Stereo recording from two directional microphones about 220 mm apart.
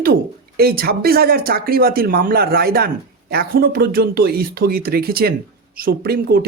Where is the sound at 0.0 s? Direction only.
45° right (ahead or behind).